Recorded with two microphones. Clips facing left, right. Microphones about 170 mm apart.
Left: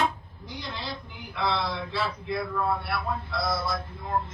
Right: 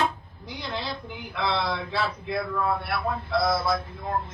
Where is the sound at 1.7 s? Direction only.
60° right (ahead or behind).